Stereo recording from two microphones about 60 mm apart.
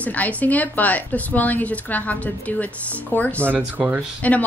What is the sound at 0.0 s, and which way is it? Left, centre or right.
A woman's voice, left.